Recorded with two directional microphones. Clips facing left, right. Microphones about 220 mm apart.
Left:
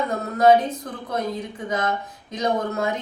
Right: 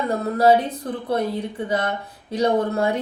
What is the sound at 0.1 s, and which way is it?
Speech, 30° right (ahead or behind).